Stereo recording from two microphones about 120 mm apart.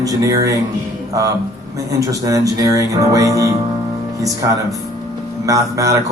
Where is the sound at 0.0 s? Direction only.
30° right (ahead or behind).